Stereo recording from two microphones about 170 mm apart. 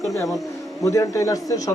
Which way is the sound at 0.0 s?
20° left (ahead or behind).